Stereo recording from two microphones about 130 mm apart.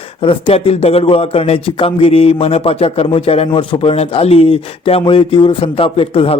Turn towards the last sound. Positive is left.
turn(degrees=45)  # may be behind; listen again after turning